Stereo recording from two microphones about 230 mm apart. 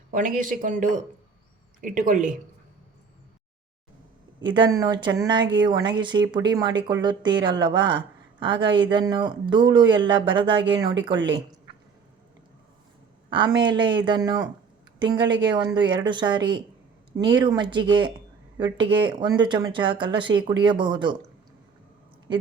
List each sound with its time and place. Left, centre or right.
0.1 s speech: right
4.5 s a woman's voice: centre
13.3 s a woman's voice: centre